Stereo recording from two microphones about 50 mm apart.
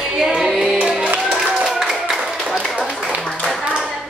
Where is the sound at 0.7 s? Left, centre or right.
Centre.